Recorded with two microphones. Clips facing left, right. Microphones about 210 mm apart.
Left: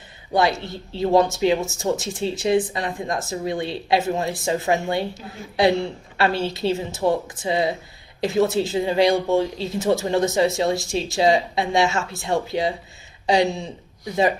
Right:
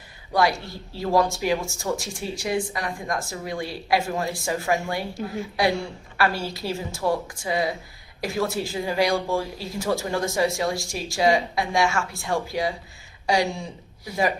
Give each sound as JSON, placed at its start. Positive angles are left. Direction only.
{"t": 0.3, "sound": "speech", "side_deg": 20}